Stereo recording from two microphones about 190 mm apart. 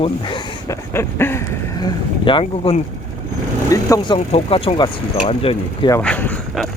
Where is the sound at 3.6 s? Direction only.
15° left (ahead or behind).